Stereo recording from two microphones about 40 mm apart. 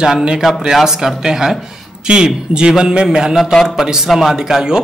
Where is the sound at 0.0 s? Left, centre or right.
Right.